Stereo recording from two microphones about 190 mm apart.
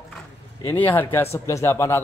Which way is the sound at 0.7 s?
10° left (ahead or behind).